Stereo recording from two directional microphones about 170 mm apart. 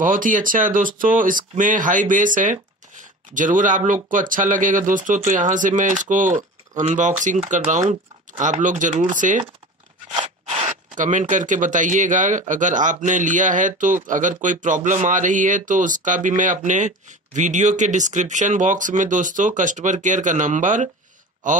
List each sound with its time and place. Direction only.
0.0 s speech: 50° right (ahead or behind)